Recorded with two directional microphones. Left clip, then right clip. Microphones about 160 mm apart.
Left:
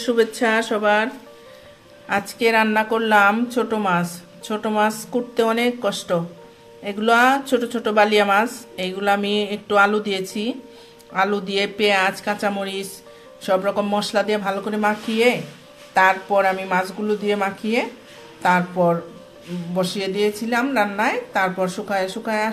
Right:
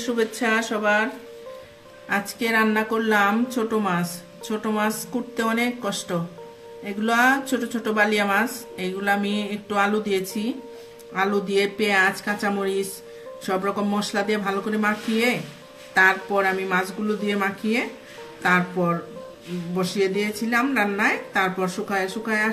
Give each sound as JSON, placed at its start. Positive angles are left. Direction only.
{"t": 0.0, "sound": "a woman's voice", "side_deg": 25}
{"t": 19.8, "sound": "a woman's voice", "side_deg": 20}